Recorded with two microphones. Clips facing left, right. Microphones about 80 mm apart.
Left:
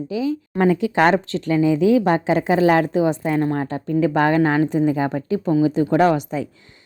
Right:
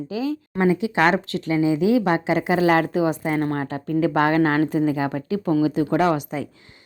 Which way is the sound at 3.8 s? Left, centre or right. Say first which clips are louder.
Left 2 dB; left.